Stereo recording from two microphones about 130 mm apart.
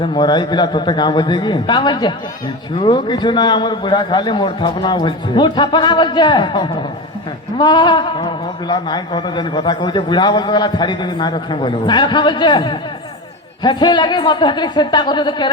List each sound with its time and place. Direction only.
0.0 s a man's voice: 35° left (ahead or behind)